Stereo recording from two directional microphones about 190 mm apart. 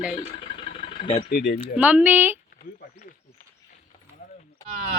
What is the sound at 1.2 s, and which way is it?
Speech, 60° left (ahead or behind).